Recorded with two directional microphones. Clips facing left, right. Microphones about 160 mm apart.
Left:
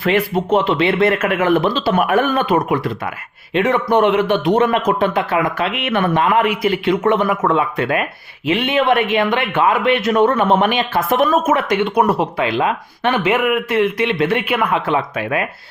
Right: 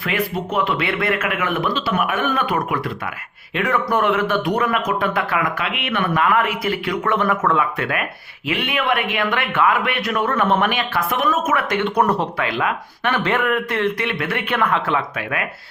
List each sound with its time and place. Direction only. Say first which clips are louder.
0.0 s speech: left 6 dB; 30° left (ahead or behind)
6.2 s speech: left 4 dB; 20° left (ahead or behind)
11.7 s speech: left 3 dB; 10° left (ahead or behind)
12.4 s speech: left 4 dB; 25° left (ahead or behind)
13.2 s speech: left 3 dB; 10° left (ahead or behind)
14.4 s speech: left 2 dB; 10° left (ahead or behind)